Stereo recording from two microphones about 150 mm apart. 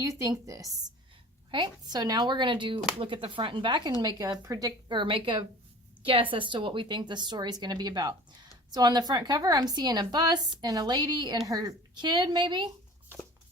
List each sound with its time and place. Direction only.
0.0 s a woman's voice: 20° right (ahead or behind)